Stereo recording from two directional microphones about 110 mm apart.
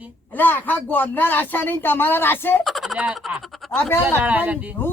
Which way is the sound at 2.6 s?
Centre (ahead or behind).